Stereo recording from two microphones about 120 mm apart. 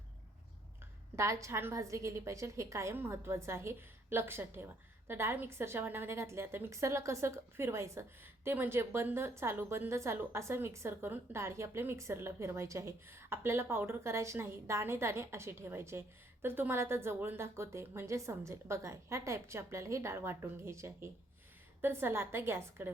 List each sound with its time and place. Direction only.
1.1 s a woman's voice: 25° right (ahead or behind)